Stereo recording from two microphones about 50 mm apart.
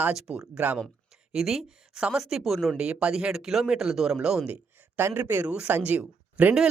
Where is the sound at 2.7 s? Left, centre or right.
Right.